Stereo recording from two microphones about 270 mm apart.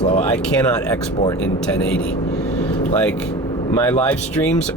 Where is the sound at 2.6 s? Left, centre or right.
Centre.